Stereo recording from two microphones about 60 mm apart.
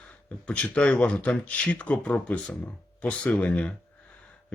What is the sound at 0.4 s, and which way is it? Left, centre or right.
Speech, left.